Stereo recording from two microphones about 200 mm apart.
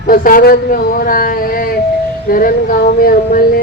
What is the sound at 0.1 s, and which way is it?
Speech, 45° left (ahead or behind).